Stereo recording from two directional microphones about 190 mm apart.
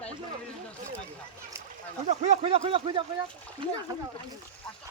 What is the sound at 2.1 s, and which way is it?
Speech, 35° right (ahead or behind).